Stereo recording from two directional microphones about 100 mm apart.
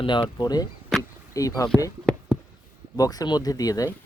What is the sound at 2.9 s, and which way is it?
Speech, 40° left (ahead or behind).